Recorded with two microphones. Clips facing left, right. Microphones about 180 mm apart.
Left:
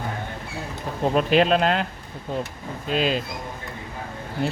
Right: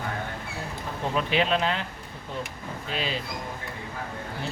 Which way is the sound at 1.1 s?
45° left (ahead or behind).